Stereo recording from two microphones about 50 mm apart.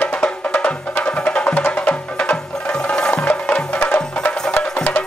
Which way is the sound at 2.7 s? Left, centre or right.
Centre.